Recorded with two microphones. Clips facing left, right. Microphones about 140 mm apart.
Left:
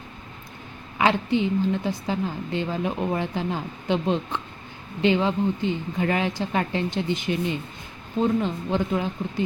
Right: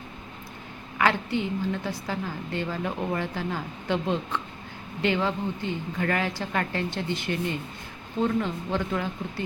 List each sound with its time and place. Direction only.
0.9 s a woman's voice: 20° left (ahead or behind)